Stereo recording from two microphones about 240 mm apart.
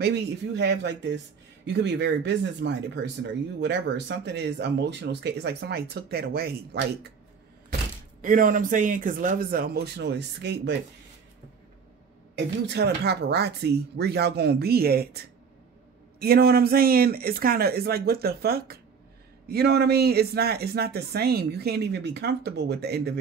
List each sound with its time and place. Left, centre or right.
0.0 s speech: right
8.2 s speech: right
12.4 s speech: right